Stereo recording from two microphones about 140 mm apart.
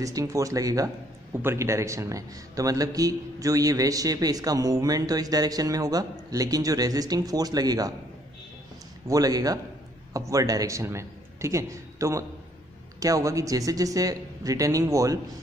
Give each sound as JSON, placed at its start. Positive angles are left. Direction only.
{"t": 0.0, "sound": "a man's voice", "side_deg": -25}
{"t": 9.0, "sound": "a man's voice", "side_deg": -25}